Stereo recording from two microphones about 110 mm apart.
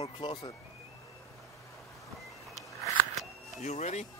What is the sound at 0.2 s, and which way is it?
Speech, 40° left (ahead or behind).